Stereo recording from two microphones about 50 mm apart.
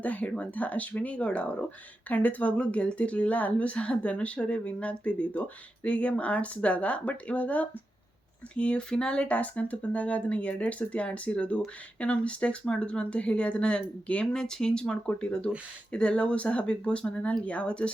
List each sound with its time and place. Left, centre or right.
0.0 s speech: left